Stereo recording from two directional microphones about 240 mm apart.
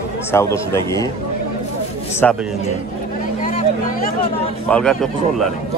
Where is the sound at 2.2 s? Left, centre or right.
Centre.